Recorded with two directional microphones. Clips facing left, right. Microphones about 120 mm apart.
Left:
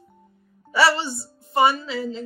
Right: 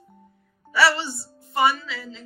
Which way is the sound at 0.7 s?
25° left (ahead or behind).